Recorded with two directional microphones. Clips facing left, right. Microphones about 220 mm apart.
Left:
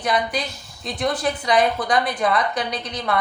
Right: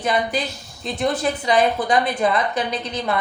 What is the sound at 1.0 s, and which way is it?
A woman's voice, 25° right (ahead or behind).